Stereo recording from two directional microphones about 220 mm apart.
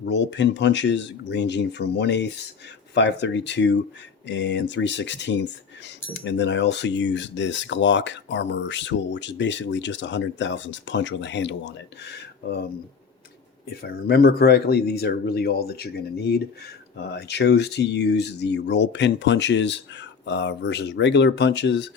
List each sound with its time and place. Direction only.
0.0 s speech: 55° left (ahead or behind)
13.8 s speech: 45° left (ahead or behind)